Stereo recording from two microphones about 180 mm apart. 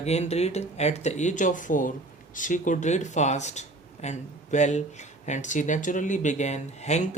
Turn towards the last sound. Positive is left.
turn(degrees=40)  # may be behind; listen again after turning